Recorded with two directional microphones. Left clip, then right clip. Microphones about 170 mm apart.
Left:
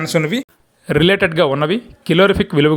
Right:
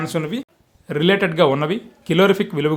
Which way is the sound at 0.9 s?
40° left (ahead or behind).